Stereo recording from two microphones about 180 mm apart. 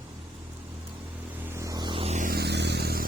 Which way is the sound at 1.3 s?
15° right (ahead or behind).